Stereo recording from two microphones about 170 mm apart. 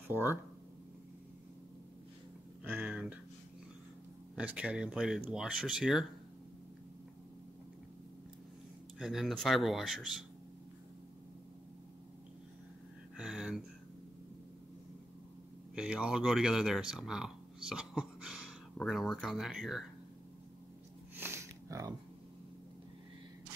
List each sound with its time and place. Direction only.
2.6 s speech: 10° right (ahead or behind)
4.4 s speech: 5° right (ahead or behind)
8.9 s speech: centre (ahead or behind)
13.2 s a sound: 5° right (ahead or behind)
15.7 s speech: 5° right (ahead or behind)
16.9 s a sound: 5° right (ahead or behind)
18.8 s speech: centre (ahead or behind)
21.2 s sniff: 15° right (ahead or behind)